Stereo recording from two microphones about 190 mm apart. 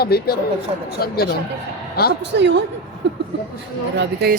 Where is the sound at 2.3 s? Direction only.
65° right (ahead or behind).